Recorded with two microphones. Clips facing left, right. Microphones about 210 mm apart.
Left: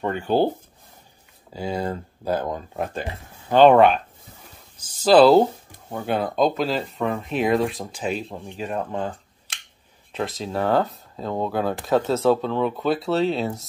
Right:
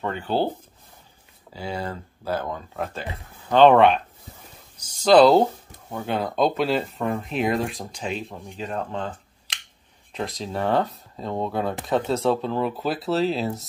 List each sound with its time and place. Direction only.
0.0 s speech: 15° left (ahead or behind)
1.6 s speech: 15° left (ahead or behind)
5.0 s speech: 5° left (ahead or behind)
10.1 s speech: centre (ahead or behind)